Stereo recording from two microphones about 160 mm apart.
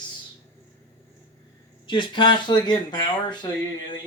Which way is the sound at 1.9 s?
30° left (ahead or behind).